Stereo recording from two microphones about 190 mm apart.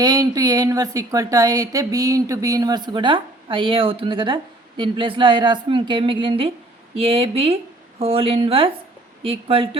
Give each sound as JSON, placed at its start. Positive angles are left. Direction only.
{"t": 0.0, "sound": "speech", "side_deg": -20}